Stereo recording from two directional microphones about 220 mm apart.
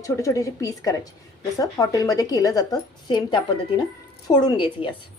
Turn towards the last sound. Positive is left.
turn(degrees=25)  # may be behind; listen again after turning